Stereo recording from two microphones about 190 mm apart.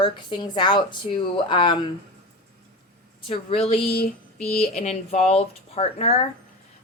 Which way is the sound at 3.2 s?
30° left (ahead or behind).